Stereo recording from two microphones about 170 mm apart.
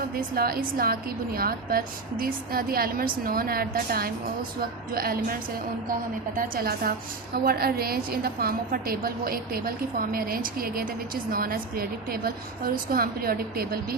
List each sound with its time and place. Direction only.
0.2 s a woman's voice: 60° right (ahead or behind)